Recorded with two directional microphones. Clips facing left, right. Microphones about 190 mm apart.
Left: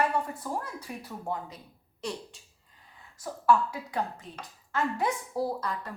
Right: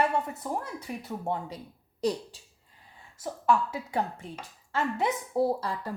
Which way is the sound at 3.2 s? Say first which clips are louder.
Left 1 dB; 25° right (ahead or behind).